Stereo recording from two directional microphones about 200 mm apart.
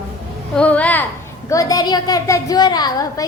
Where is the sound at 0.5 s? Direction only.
5° left (ahead or behind).